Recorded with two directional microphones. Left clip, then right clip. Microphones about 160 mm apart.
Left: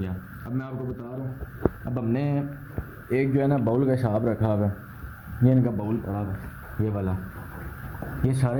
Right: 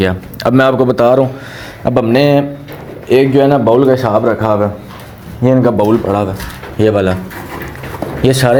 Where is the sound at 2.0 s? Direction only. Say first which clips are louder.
Right 19 dB; 10° right (ahead or behind).